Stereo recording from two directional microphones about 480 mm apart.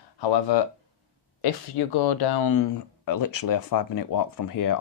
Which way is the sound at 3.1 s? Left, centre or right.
Left.